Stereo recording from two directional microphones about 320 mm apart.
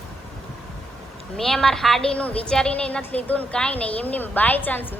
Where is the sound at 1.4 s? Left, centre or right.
Centre.